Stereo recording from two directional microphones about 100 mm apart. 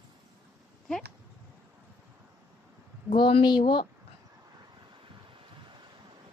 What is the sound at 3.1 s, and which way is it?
Speech, 60° left (ahead or behind).